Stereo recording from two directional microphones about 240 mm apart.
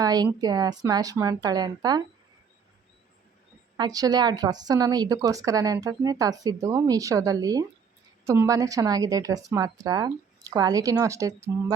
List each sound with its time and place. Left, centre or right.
0.0 s a woman's voice: centre
3.8 s a woman's voice: centre